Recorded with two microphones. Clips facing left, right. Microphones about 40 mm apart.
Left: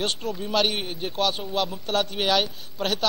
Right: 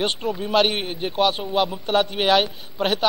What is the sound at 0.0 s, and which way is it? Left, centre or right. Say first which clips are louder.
A man's voice: right 4 dB; centre.